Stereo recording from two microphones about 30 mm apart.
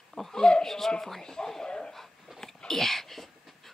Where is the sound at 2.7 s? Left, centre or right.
Centre.